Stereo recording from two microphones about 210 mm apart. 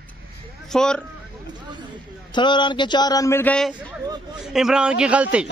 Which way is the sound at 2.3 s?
20° left (ahead or behind).